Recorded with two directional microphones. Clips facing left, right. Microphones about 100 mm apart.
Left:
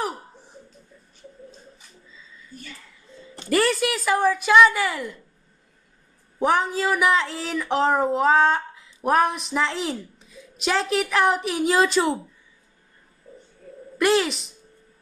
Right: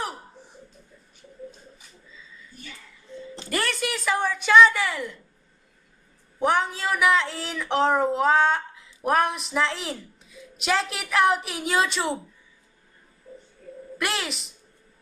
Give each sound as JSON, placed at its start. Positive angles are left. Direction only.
{"t": 3.4, "sound": "speech", "side_deg": 0}
{"t": 6.4, "sound": "speech", "side_deg": 0}
{"t": 13.9, "sound": "speech", "side_deg": 0}